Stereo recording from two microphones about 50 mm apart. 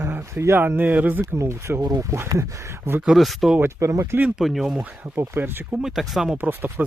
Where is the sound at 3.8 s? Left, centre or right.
Right.